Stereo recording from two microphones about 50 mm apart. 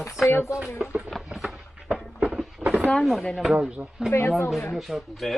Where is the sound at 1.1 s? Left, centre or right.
Centre.